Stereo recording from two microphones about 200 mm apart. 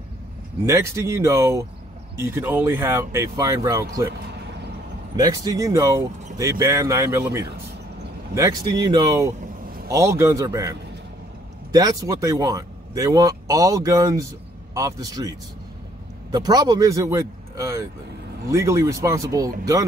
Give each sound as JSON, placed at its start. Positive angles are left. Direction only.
{"t": 0.7, "sound": "speech", "side_deg": -15}
{"t": 4.1, "sound": "a sound", "side_deg": -55}
{"t": 5.1, "sound": "speech", "side_deg": -20}